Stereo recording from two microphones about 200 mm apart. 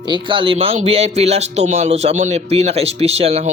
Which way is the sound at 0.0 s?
25° right (ahead or behind).